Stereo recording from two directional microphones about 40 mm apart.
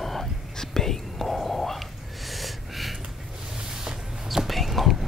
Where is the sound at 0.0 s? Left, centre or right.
Centre.